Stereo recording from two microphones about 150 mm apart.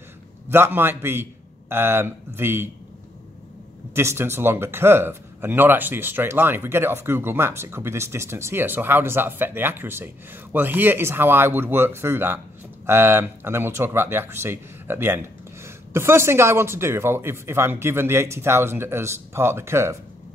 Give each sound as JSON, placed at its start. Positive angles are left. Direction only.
{"t": 0.5, "sound": "speech", "side_deg": -15}
{"t": 3.9, "sound": "speech", "side_deg": -15}